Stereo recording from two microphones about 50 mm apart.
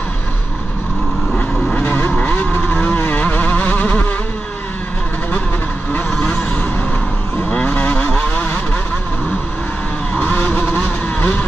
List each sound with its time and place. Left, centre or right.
1.7 s vehicle: left
6.1 s vehicle: centre
10.1 s vehicle: left